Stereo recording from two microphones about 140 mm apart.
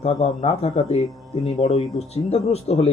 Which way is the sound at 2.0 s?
50° left (ahead or behind).